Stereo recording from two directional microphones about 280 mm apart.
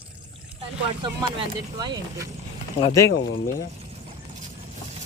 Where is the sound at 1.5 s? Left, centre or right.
Centre.